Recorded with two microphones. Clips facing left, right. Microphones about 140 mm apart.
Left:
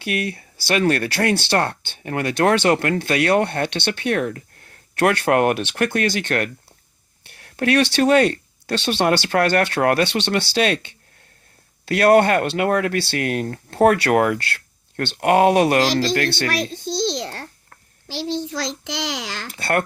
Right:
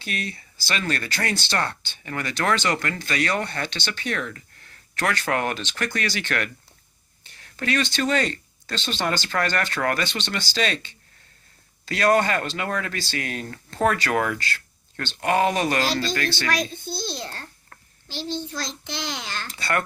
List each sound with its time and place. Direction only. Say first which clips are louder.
0.0 s speech: left 7 dB; 60° left (ahead or behind)
7.3 s a child's voice: left 7 dB; 65° left (ahead or behind); by 19.5 s 90° left
19.5 s speech: left 5 dB; 55° left (ahead or behind)